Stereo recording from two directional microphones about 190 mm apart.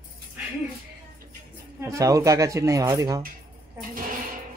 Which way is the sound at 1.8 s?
15° right (ahead or behind).